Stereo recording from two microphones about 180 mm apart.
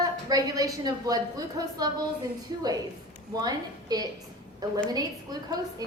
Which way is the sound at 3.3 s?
20° right (ahead or behind).